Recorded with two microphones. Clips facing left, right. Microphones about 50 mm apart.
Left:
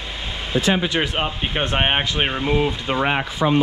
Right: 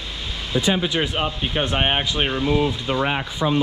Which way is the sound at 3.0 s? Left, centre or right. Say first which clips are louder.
Left 3 dB; left.